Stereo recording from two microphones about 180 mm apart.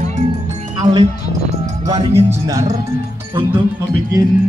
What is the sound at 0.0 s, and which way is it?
Music, 40° right (ahead or behind).